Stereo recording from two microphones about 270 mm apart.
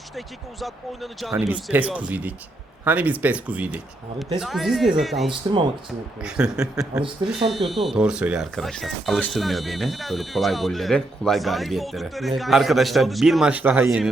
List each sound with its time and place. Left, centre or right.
0.6 s speech: centre